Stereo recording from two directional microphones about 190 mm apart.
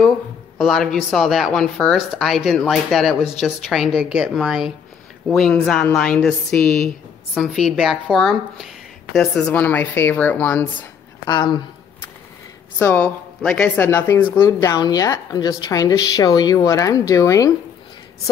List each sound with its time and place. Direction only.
0.6 s speech: centre (ahead or behind)
11.2 s speech: 20° left (ahead or behind)
12.7 s speech: 10° left (ahead or behind)